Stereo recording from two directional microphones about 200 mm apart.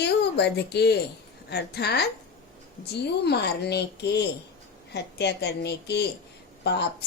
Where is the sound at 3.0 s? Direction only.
55° left (ahead or behind).